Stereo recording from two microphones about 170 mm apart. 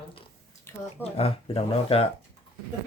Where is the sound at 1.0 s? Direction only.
35° left (ahead or behind).